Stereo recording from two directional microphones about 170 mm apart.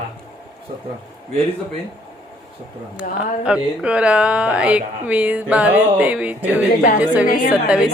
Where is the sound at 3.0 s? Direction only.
5° right (ahead or behind).